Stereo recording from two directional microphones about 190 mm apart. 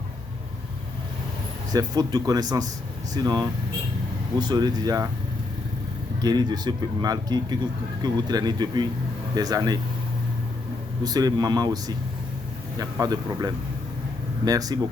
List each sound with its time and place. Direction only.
1.7 s speech: 20° right (ahead or behind)
6.2 s speech: 20° right (ahead or behind)
11.0 s speech: 20° right (ahead or behind)